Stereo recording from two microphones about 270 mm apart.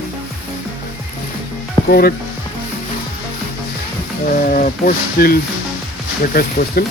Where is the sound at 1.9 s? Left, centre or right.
Left.